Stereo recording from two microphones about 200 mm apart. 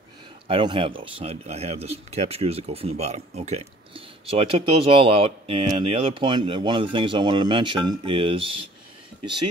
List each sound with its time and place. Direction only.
0.5 s speech: 25° right (ahead or behind)